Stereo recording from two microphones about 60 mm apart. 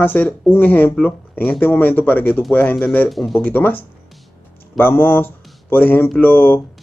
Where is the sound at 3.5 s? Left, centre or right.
Left.